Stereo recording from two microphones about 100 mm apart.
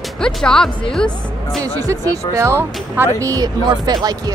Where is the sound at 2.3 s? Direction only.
25° right (ahead or behind).